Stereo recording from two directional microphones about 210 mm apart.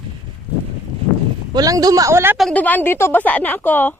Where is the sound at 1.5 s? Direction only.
15° right (ahead or behind).